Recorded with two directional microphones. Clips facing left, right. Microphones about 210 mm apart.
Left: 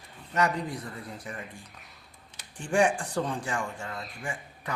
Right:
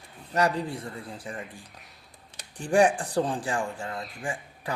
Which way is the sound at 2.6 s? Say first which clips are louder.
Right 3 dB; 35° right (ahead or behind).